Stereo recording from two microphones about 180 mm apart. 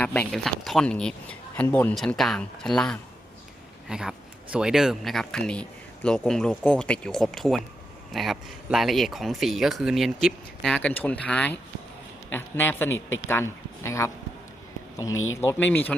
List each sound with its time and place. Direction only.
0.0 s speech: 10° left (ahead or behind)
15.1 s speech: 90° left
15.4 s speech: 10° left (ahead or behind)